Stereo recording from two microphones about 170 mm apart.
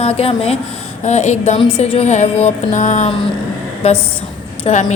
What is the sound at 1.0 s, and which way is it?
Speech, 40° left (ahead or behind).